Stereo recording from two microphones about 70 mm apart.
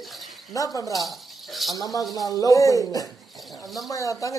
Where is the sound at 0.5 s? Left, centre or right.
Left.